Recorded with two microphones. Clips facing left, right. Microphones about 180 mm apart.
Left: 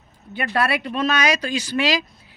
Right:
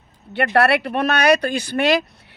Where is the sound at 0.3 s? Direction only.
70° right (ahead or behind).